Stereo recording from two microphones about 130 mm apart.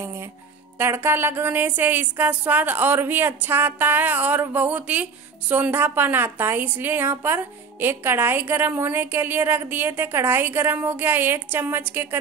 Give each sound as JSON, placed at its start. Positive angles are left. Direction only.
{"t": 0.7, "sound": "a woman's voice", "side_deg": -15}